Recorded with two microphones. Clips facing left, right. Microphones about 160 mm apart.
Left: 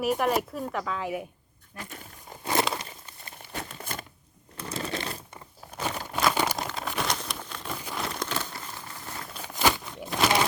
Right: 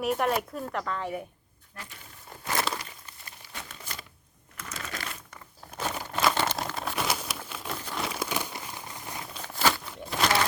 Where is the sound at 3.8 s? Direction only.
50° left (ahead or behind).